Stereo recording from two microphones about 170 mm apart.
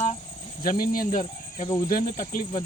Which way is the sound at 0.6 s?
55° left (ahead or behind).